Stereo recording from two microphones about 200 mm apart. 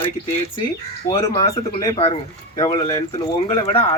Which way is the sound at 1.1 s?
15° left (ahead or behind).